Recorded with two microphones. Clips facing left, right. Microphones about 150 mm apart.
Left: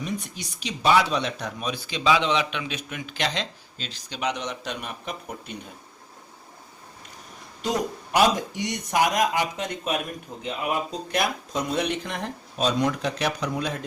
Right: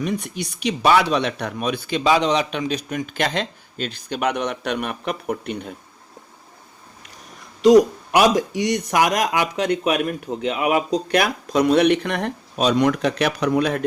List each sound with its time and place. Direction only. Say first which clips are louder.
0.0 s speech: right 7 dB; 65° right (ahead or behind)
7.6 s speech: right 15 dB; 85° right; by 13.8 s 65° right (ahead or behind)